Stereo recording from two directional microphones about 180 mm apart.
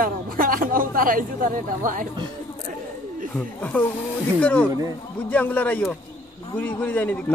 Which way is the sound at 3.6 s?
10° left (ahead or behind).